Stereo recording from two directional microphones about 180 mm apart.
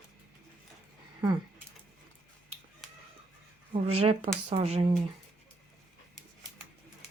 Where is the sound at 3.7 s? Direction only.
35° right (ahead or behind).